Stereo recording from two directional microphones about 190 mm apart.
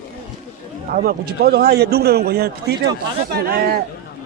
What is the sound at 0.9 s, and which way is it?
A man's voice, 50° right (ahead or behind).